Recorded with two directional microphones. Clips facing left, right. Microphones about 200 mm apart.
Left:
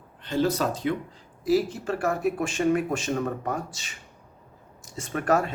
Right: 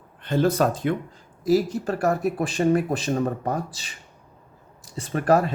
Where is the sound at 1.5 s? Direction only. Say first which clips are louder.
Right 3 dB; 40° right (ahead or behind).